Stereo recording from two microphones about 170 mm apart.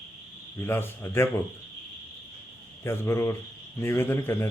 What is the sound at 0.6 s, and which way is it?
Speech, 15° left (ahead or behind).